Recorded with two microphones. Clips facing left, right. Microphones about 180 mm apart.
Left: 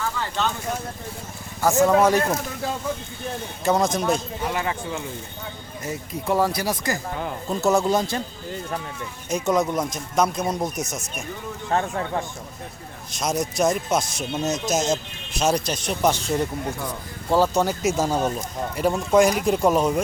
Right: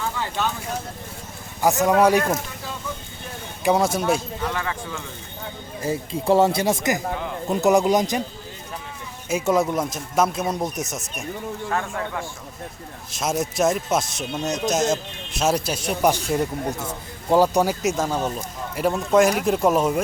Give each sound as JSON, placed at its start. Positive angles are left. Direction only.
{"t": 1.6, "sound": "speech", "side_deg": -15}
{"t": 3.6, "sound": "speech", "side_deg": -10}
{"t": 4.4, "sound": "speech", "side_deg": 20}
{"t": 5.8, "sound": "speech", "side_deg": -30}
{"t": 9.3, "sound": "speech", "side_deg": -5}
{"t": 11.7, "sound": "speech", "side_deg": 30}
{"t": 13.1, "sound": "speech", "side_deg": -5}
{"t": 17.8, "sound": "speech", "side_deg": 10}
{"t": 18.8, "sound": "speech", "side_deg": 0}